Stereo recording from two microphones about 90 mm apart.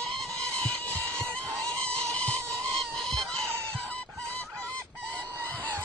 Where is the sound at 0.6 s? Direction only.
15° left (ahead or behind).